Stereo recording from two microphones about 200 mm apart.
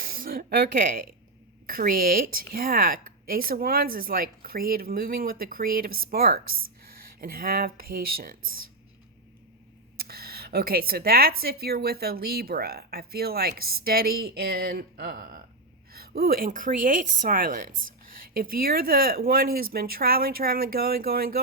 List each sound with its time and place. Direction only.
0.0 s speech: 45° right (ahead or behind)
10.0 s speech: 50° right (ahead or behind)